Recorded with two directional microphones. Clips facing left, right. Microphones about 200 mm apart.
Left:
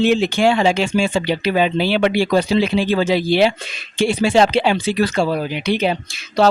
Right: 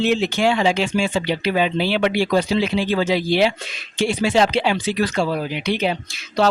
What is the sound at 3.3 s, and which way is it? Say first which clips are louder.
Speech: left 3 dB; 60° left (ahead or behind).